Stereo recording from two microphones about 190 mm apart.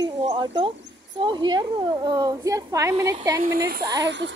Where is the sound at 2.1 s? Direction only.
20° right (ahead or behind).